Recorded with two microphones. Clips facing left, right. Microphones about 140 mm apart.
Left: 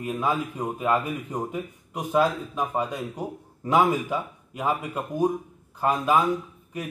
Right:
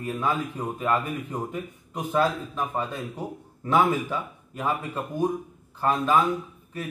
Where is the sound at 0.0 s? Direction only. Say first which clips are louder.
Left 1 dB; 15° left (ahead or behind).